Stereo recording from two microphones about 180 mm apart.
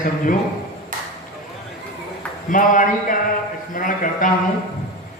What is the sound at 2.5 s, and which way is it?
A man's voice, 45° left (ahead or behind).